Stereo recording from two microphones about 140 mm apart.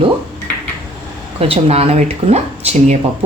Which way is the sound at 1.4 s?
45° right (ahead or behind).